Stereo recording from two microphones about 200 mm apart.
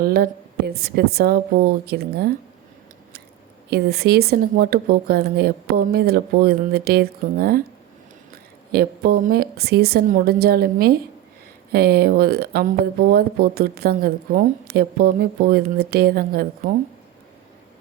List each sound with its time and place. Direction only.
0.0 s a woman's voice: 50° right (ahead or behind)
3.7 s a woman's voice: 55° right (ahead or behind)
8.7 s a woman's voice: 50° right (ahead or behind)